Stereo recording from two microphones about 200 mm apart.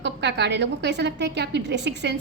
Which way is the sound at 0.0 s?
60° right (ahead or behind).